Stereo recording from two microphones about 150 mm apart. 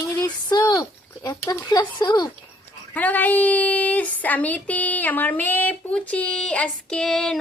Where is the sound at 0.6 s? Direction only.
25° left (ahead or behind).